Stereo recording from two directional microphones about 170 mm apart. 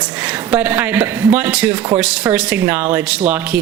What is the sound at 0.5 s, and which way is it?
Speech, 10° right (ahead or behind).